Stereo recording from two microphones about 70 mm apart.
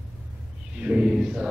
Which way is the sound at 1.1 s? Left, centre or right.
Centre.